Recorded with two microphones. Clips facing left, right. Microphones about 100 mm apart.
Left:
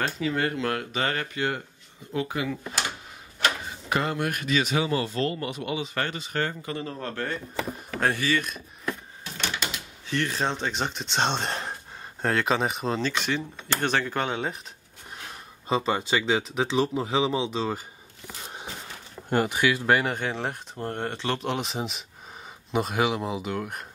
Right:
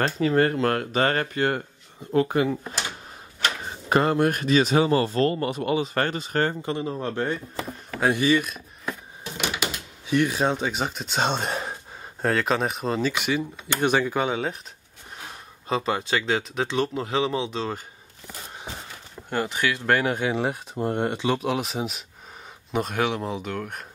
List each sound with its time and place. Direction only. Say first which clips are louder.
0.0 s speech: right 6 dB; 40° right (ahead or behind)
3.9 s speech: right 6 dB; 40° right (ahead or behind); by 8.4 s 15° right (ahead or behind)
9.2 s typewriter: right 4 dB; 10° right (ahead or behind)
10.0 s speech: right 5 dB; 15° right (ahead or behind)
15.7 s speech: even; centre (ahead or behind)
19.2 s speech: left 2 dB; 15° left (ahead or behind)